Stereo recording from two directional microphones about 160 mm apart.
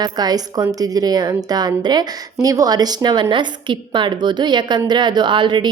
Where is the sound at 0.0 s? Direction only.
25° right (ahead or behind).